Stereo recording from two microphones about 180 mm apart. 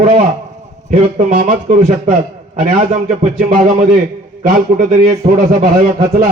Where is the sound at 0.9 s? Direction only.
45° right (ahead or behind).